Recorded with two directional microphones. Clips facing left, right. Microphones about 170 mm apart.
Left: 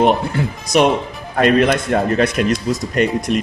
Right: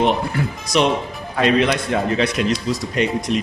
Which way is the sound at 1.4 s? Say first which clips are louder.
Left 3 dB; 50° left (ahead or behind).